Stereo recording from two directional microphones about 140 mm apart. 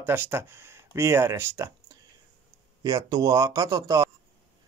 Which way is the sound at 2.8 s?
25° right (ahead or behind).